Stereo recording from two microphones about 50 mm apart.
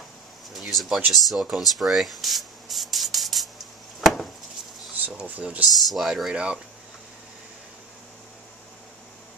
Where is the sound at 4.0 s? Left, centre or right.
Centre.